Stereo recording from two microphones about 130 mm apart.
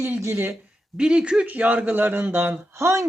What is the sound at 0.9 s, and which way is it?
Speech, 5° right (ahead or behind).